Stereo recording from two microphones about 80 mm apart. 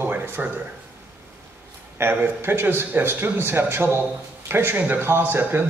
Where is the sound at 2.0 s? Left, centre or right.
Right.